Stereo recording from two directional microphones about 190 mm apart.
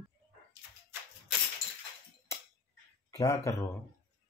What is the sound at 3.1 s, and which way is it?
Speech, 15° left (ahead or behind).